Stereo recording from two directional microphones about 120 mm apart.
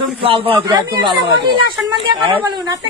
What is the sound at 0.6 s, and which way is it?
A woman's voice, 30° right (ahead or behind).